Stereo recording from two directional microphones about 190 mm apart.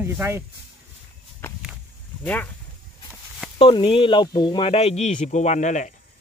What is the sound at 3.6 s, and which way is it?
Speech, 30° left (ahead or behind).